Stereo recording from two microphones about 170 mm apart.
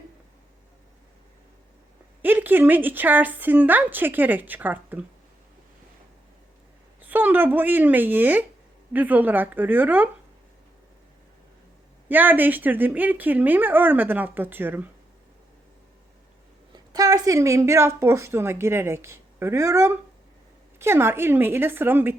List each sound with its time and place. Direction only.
2.2 s a woman's voice: 10° right (ahead or behind)
7.0 s a woman's voice: 10° right (ahead or behind)
12.0 s a woman's voice: 10° right (ahead or behind)
16.7 s a woman's voice: 20° right (ahead or behind)